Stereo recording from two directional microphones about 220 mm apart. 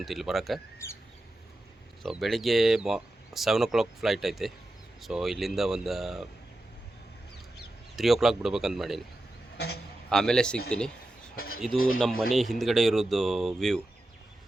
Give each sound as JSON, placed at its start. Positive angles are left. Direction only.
{"t": 0.0, "sound": "speech", "side_deg": 0}
{"t": 2.0, "sound": "speech", "side_deg": 0}
{"t": 7.9, "sound": "speech", "side_deg": 0}
{"t": 9.6, "sound": "a man's voice", "side_deg": 45}
{"t": 10.1, "sound": "speech", "side_deg": 5}
{"t": 11.3, "sound": "a sound", "side_deg": 40}
{"t": 12.3, "sound": "speech", "side_deg": 0}